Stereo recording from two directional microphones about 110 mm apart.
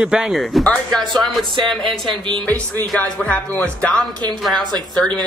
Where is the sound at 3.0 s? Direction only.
15° left (ahead or behind).